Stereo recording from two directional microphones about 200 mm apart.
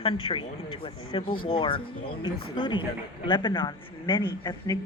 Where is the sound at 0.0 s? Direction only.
25° left (ahead or behind).